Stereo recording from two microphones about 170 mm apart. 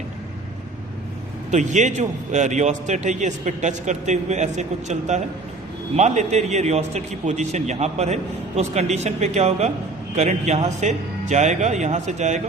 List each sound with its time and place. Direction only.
1.5 s a man's voice: 45° right (ahead or behind)